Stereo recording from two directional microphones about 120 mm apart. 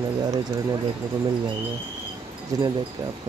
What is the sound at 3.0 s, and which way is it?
Speech, 30° right (ahead or behind).